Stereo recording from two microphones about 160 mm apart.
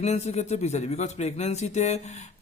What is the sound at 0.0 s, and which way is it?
Speech, 45° left (ahead or behind).